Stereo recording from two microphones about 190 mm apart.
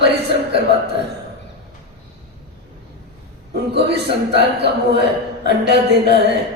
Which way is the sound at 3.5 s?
60° right (ahead or behind).